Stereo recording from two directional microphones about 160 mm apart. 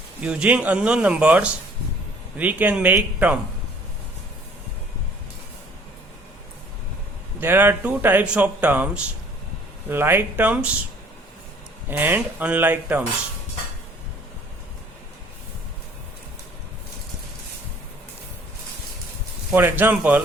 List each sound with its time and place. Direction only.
0.2 s speech: 10° right (ahead or behind)
7.3 s speech: 15° right (ahead or behind)
11.9 s speech: 10° right (ahead or behind)
19.5 s speech: 10° right (ahead or behind)